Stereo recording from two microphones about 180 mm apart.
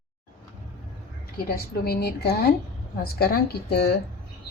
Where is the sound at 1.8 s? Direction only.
60° left (ahead or behind).